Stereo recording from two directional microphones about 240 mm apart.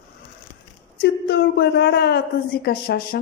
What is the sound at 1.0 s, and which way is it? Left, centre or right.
Speech, left.